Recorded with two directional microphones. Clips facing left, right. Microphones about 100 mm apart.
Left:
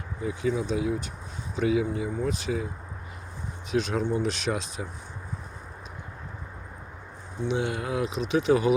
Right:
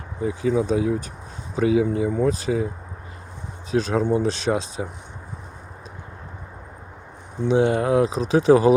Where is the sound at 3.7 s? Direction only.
35° right (ahead or behind).